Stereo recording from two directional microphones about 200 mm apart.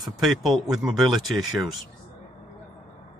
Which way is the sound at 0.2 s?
Centre (ahead or behind).